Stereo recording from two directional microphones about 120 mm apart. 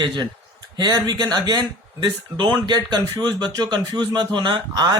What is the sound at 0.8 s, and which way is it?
A man's voice, 35° right (ahead or behind).